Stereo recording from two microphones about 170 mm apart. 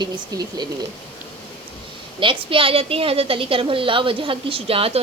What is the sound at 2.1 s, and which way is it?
A woman's voice, 30° right (ahead or behind).